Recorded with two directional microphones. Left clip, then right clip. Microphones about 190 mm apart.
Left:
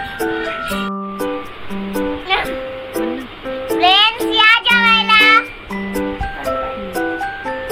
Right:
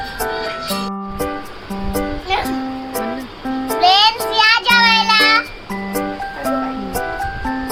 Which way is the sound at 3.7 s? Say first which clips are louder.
Even; 20° right (ahead or behind).